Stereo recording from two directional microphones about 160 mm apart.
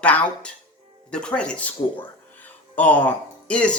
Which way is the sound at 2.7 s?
10° left (ahead or behind).